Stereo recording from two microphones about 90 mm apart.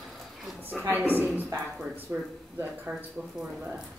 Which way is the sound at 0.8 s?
20° right (ahead or behind).